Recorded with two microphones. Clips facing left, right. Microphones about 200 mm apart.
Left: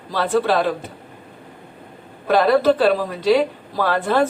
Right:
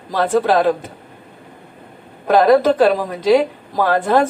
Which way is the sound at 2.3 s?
45° right (ahead or behind).